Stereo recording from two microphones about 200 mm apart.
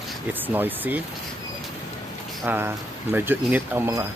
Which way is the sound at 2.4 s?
10° right (ahead or behind).